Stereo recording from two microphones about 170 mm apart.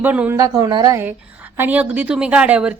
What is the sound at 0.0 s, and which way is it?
Speech, 10° right (ahead or behind).